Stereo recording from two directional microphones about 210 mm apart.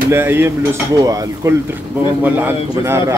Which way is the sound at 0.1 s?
10° right (ahead or behind).